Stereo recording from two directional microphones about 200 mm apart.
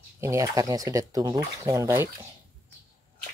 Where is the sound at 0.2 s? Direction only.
15° right (ahead or behind).